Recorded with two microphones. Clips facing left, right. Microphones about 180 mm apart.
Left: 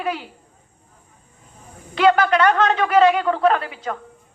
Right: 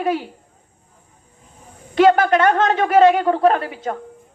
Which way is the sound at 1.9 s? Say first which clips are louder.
Right 3 dB; 45° right (ahead or behind).